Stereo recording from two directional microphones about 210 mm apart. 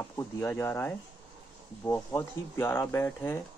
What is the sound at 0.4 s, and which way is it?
Speech, 10° left (ahead or behind).